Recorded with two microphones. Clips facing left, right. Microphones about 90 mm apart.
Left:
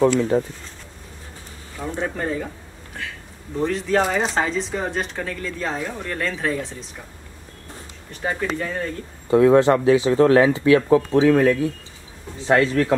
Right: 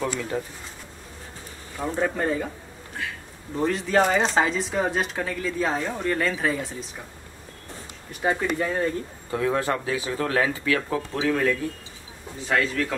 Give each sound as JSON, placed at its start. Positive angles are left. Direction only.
{"t": 0.3, "sound": "speech", "side_deg": 30}
{"t": 1.8, "sound": "speech", "side_deg": -5}
{"t": 3.5, "sound": "speech", "side_deg": 0}
{"t": 8.1, "sound": "speech", "side_deg": -10}
{"t": 9.3, "sound": "speech", "side_deg": 25}